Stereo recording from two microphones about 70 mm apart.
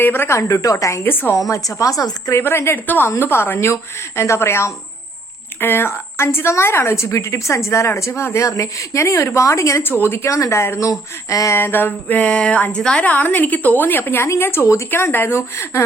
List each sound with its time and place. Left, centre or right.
0.0 s a woman's voice: left
0.3 s a woman's voice: left
2.3 s a woman's voice: left
3.1 s a woman's voice: left
9.9 s a woman's voice: left
10.2 s a woman's voice: left
11.5 s a sound: left
14.3 s a woman's voice: left